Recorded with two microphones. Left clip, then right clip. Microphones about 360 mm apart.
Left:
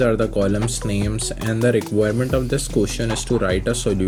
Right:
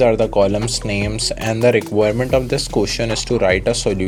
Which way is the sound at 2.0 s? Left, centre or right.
Right.